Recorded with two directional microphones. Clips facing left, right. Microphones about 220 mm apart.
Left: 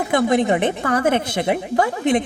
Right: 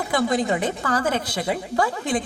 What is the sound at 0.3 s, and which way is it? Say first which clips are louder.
A woman's voice: left 5 dB; 20° left (ahead or behind).